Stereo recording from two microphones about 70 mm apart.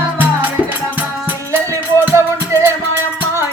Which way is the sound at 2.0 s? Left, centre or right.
Right.